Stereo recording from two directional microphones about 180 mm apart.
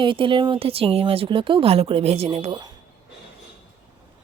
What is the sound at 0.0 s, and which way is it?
Speech, 30° right (ahead or behind).